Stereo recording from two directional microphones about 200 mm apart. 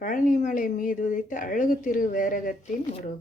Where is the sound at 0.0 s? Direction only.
40° left (ahead or behind).